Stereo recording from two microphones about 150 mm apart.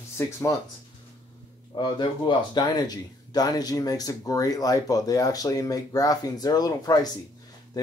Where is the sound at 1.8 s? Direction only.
30° left (ahead or behind).